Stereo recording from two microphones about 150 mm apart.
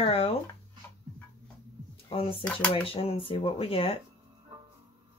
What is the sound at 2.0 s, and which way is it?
Speech, 40° left (ahead or behind).